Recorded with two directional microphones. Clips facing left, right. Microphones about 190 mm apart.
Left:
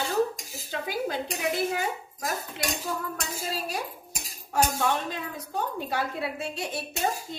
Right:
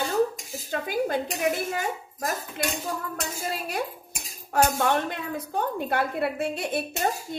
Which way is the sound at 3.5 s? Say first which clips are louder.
Right 2 dB; 60° right (ahead or behind).